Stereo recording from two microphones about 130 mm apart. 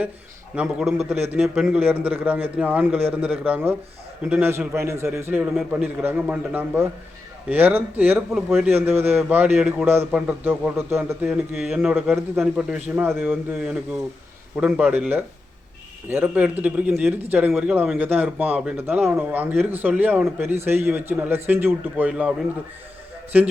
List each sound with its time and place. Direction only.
0.5 s speech: 5° right (ahead or behind)
10.1 s speech: 5° right (ahead or behind)
10.4 s speech: 15° right (ahead or behind)